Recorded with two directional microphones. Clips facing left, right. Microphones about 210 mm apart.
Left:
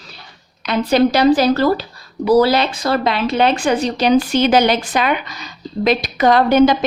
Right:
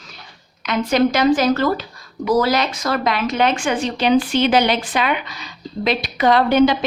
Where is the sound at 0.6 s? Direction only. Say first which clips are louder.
Left 3 dB; 35° left (ahead or behind).